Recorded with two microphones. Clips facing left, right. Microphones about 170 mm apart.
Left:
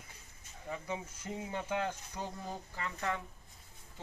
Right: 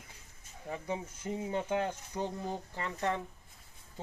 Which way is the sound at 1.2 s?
15° right (ahead or behind).